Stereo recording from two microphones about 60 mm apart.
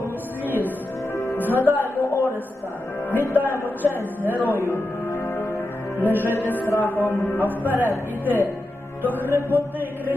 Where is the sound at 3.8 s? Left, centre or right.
Right.